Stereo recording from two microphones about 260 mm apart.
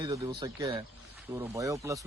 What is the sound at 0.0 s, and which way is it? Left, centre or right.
Speech, centre.